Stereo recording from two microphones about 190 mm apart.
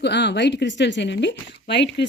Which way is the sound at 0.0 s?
65° left (ahead or behind).